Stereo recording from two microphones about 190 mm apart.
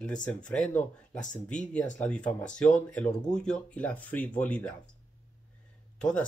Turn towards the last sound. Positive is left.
turn(degrees=5)  # may be behind; listen again after turning